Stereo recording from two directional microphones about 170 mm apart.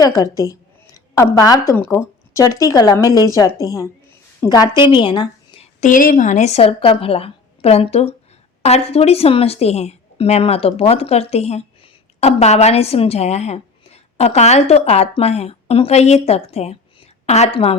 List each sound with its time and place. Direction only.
0.0 s a woman's voice: 20° left (ahead or behind)
5.8 s a woman's voice: 55° left (ahead or behind); by 17.7 s 35° left (ahead or behind)